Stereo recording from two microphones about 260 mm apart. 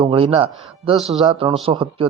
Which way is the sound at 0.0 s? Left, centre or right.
Right.